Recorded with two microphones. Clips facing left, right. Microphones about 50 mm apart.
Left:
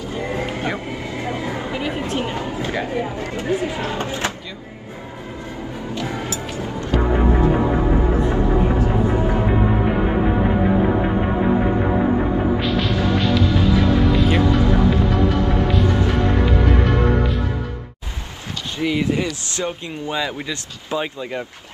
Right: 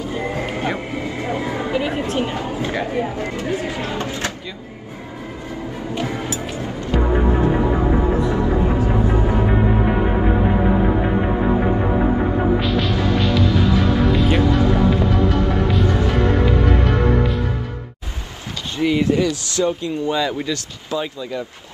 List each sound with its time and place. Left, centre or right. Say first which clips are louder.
0.0 s music: right 1 dB; right
1.3 s a sound: right 4 dB; right
1.8 s chatter: right 3 dB; right
2.1 s speech: right 2 dB; right
3.3 s speech: left 5 dB; left
5.9 s music: right 2 dB; right
8.2 s music: even; left
12.5 s music: right 1 dB; centre
18.8 s speech: right 3 dB; centre
19.1 s speech: right 5 dB; left
20.9 s speech: even; left